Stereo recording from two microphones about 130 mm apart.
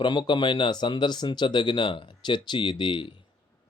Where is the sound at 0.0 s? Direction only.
35° left (ahead or behind).